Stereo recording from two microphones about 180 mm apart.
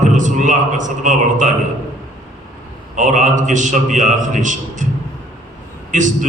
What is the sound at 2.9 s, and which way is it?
A man's voice, 45° right (ahead or behind).